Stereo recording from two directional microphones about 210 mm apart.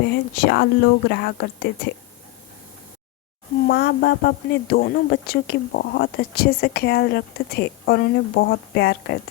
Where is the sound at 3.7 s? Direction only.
55° left (ahead or behind).